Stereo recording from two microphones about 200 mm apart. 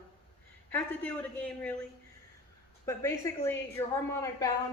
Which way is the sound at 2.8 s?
15° left (ahead or behind).